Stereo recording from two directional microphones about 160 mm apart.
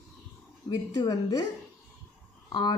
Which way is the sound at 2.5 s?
30° left (ahead or behind).